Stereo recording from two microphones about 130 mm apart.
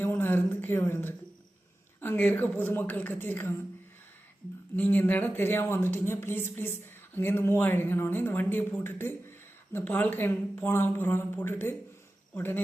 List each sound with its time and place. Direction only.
0.0 s a sound: 15° left (ahead or behind)
2.0 s speech: 15° left (ahead or behind)
4.8 s speech: 15° left (ahead or behind)